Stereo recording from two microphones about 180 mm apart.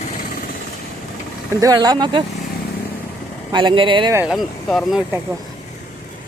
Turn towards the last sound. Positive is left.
turn(degrees=0)  # may be behind; listen again after turning